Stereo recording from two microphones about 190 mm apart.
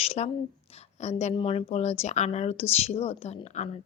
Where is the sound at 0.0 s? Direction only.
30° left (ahead or behind).